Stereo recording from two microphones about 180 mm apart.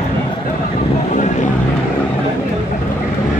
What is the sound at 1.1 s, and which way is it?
Vehicle, 45° left (ahead or behind).